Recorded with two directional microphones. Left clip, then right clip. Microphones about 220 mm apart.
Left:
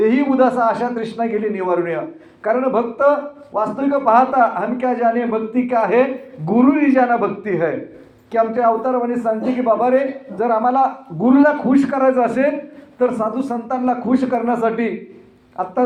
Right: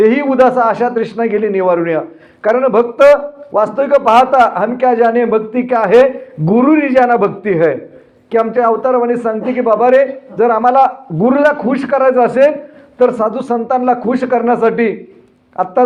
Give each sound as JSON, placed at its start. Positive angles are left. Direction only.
{"t": 0.0, "sound": "a man's voice", "side_deg": -50}